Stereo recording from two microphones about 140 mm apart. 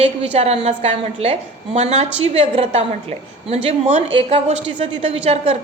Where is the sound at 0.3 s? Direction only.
50° right (ahead or behind).